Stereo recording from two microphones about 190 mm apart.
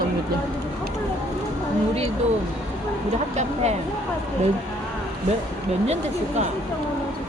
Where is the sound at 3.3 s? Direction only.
35° right (ahead or behind).